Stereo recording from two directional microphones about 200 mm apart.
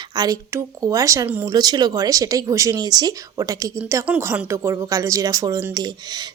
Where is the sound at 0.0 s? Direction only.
20° right (ahead or behind).